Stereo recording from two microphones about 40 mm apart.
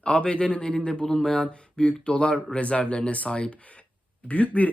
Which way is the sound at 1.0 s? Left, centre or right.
Centre.